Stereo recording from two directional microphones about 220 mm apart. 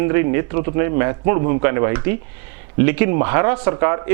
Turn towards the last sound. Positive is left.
turn(degrees=-15)  # may be behind; listen again after turning